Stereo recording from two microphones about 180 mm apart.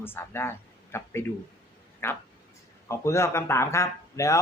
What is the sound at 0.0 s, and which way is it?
Speech, 10° left (ahead or behind).